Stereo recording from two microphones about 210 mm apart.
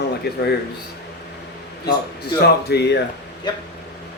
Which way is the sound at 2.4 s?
50° left (ahead or behind).